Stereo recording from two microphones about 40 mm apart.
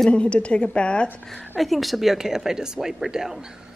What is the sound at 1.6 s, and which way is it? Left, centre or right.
A woman's voice, centre.